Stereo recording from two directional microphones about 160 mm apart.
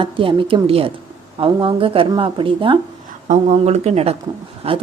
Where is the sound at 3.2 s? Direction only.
50° right (ahead or behind).